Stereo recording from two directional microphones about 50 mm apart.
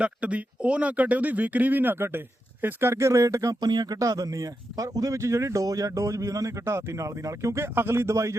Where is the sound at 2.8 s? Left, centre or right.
Right.